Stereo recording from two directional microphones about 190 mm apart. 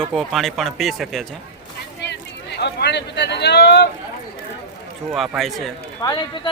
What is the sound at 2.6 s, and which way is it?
Speech, 60° left (ahead or behind).